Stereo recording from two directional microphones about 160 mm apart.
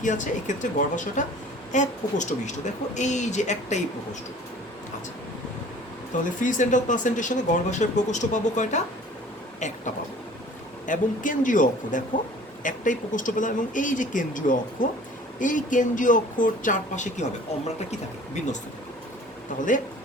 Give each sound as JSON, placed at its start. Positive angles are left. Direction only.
{"t": 0.0, "sound": "speech", "side_deg": 50}
{"t": 6.4, "sound": "speech", "side_deg": 50}
{"t": 19.5, "sound": "speech", "side_deg": 55}